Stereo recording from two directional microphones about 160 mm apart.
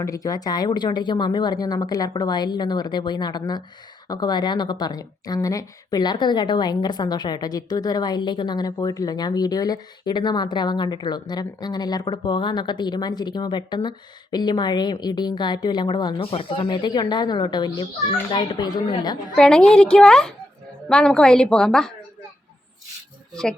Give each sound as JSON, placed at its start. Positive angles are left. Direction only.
{"t": 0.0, "sound": "a woman's voice", "side_deg": 20}
{"t": 19.4, "sound": "a woman's voice", "side_deg": 5}
{"t": 23.3, "sound": "a woman's voice", "side_deg": 5}